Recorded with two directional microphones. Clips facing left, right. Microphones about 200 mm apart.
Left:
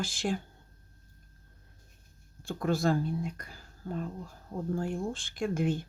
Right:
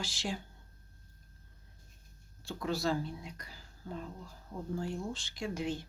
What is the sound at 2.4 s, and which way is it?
Speech, 50° left (ahead or behind).